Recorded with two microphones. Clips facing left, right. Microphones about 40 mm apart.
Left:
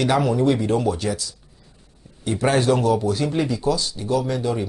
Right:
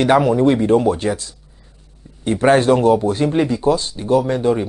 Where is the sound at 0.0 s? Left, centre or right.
Right.